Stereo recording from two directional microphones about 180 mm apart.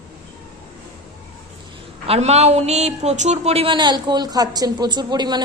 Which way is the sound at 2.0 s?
35° right (ahead or behind).